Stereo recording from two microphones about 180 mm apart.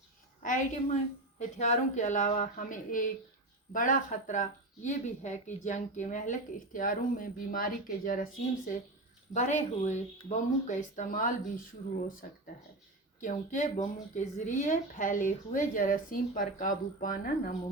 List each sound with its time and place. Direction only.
0.4 s a woman's voice: 45° left (ahead or behind)
13.2 s a woman's voice: 45° left (ahead or behind)